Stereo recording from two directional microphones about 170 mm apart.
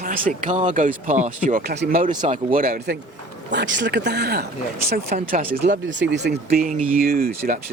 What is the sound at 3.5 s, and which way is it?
Speech, 90° right.